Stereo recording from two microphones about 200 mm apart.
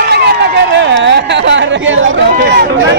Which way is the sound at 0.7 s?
60° right (ahead or behind).